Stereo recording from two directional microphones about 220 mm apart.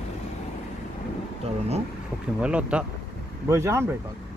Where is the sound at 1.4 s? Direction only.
30° right (ahead or behind).